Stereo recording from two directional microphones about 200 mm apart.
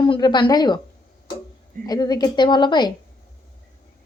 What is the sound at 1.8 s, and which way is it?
A woman's voice, 20° left (ahead or behind).